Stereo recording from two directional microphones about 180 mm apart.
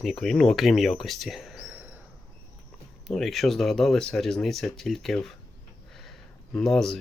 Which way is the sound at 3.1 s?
Centre (ahead or behind).